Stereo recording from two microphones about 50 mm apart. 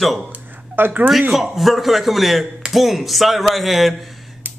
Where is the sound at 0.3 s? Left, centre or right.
Right.